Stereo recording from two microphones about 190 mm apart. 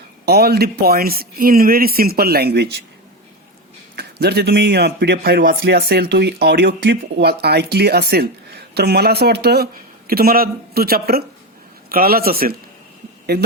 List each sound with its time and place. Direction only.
0.3 s speech: 55° right (ahead or behind)
3.9 s speech: 55° right (ahead or behind)